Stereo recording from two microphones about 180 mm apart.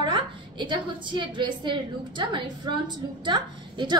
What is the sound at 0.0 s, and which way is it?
A woman's voice, 25° right (ahead or behind).